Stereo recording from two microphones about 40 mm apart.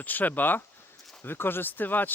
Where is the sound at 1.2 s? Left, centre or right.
Left.